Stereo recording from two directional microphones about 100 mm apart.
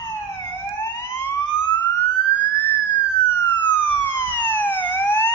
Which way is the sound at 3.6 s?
20° left (ahead or behind).